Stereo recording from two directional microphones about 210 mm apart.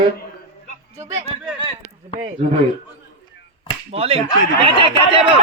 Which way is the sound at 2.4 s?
30° right (ahead or behind).